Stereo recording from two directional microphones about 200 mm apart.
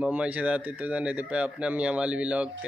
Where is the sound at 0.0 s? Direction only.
5° right (ahead or behind).